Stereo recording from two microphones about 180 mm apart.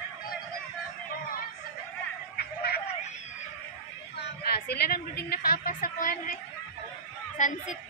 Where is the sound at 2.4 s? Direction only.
60° left (ahead or behind).